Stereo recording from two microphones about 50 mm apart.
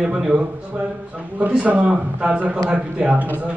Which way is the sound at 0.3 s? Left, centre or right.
Right.